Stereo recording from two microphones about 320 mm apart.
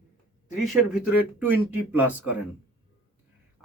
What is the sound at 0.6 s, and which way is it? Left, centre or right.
A man's voice, centre.